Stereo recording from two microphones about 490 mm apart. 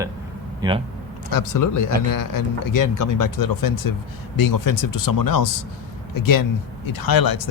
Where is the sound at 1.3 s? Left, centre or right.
Left.